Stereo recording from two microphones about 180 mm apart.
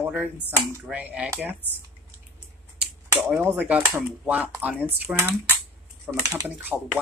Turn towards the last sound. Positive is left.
turn(degrees=-10)  # may be behind; listen again after turning